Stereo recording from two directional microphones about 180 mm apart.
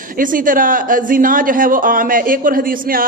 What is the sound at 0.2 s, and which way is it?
A man's voice, 50° right (ahead or behind).